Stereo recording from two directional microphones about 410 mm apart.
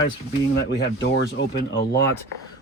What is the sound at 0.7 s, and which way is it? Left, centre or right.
Speech, left.